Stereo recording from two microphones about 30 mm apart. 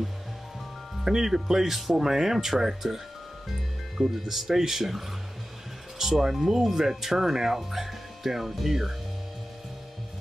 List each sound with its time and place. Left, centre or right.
1.0 s speech: centre